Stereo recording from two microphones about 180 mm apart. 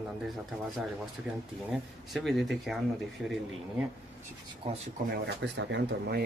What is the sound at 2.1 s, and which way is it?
Speech, centre (ahead or behind).